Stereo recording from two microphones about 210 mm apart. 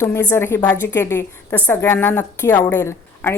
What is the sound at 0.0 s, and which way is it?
Speech, 10° left (ahead or behind).